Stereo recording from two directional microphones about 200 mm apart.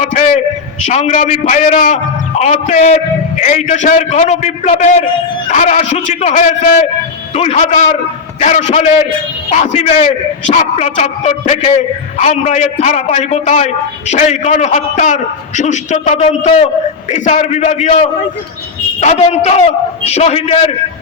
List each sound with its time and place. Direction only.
0.0 s a man's voice: 35° left (ahead or behind)